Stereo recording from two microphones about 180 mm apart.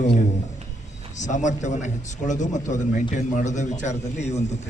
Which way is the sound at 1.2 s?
45° left (ahead or behind).